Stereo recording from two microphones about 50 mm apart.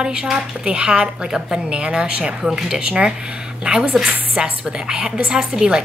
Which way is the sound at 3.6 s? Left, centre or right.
Right.